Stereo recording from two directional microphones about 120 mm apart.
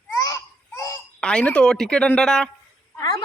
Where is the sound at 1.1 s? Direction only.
10° left (ahead or behind).